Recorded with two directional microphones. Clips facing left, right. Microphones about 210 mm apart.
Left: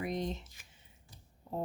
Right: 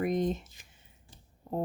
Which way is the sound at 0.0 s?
50° right (ahead or behind).